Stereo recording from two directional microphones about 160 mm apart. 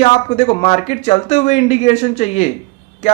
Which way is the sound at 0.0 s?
40° left (ahead or behind).